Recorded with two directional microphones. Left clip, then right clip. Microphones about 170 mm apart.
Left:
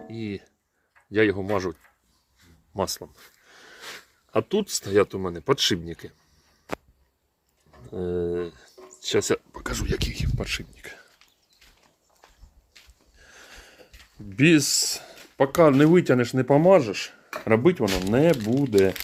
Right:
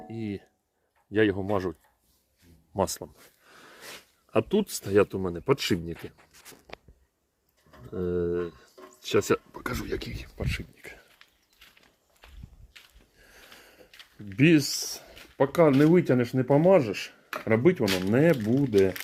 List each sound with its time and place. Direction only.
0.1 s speech: 5° right (ahead or behind)
2.7 s a sound: 15° right (ahead or behind)
4.3 s speech: 15° right (ahead or behind)
7.7 s speech: 10° right (ahead or behind)
10.1 s speech: 10° left (ahead or behind)
12.2 s walk: 20° left (ahead or behind)
13.1 s speech: centre (ahead or behind)
17.2 s speech: 10° left (ahead or behind)